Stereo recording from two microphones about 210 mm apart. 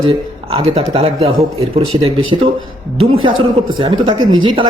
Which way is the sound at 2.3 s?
25° right (ahead or behind).